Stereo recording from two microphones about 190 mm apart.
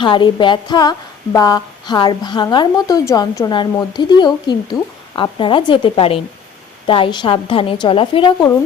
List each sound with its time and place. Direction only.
0.0 s a woman's voice: 25° left (ahead or behind)